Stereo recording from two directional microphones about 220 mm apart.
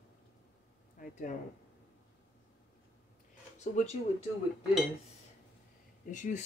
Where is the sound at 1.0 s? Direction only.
40° left (ahead or behind).